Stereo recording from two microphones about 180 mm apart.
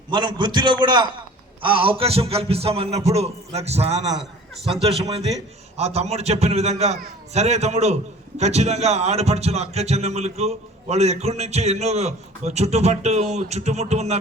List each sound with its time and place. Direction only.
0.1 s a man's voice: 25° right (ahead or behind)